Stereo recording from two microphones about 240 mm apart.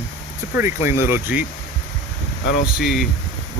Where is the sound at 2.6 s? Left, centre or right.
Centre.